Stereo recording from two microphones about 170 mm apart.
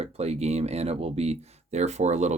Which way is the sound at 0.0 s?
40° right (ahead or behind).